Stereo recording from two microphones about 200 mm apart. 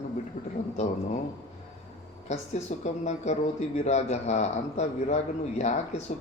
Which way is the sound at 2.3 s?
35° left (ahead or behind).